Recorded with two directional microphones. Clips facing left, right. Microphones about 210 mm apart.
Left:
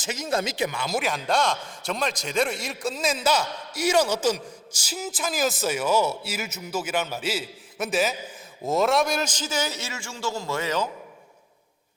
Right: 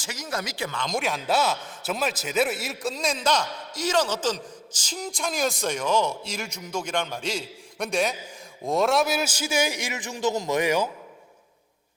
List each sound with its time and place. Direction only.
0.0 s speech: 25° left (ahead or behind)
0.8 s a man's voice: 5° left (ahead or behind); by 10.8 s 15° right (ahead or behind)